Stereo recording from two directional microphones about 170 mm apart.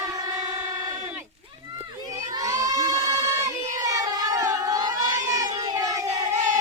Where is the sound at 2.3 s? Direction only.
20° right (ahead or behind).